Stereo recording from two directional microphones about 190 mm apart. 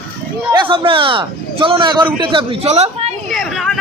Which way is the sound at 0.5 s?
25° right (ahead or behind).